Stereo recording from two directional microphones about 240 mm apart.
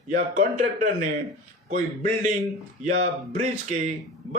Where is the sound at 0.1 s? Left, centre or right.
Right.